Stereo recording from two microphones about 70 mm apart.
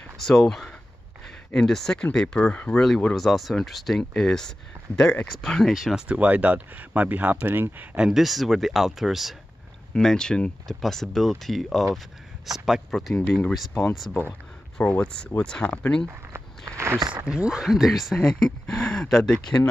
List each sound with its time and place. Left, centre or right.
0.2 s speech: centre
3.2 s speech: centre
5.9 s speech: centre
8.0 s speech: centre
9.9 s speech: centre
14.8 s speech: centre
16.7 s speech: right
17.1 s speech: centre
18.2 s speech: centre